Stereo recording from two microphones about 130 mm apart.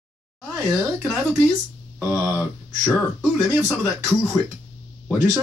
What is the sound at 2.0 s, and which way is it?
Speech, 15° right (ahead or behind).